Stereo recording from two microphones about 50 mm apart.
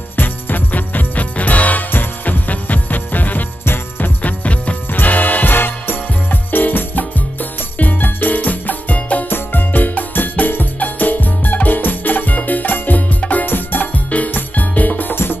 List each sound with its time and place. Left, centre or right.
0.1 s music: left
3.6 s music: left
4.2 s music: left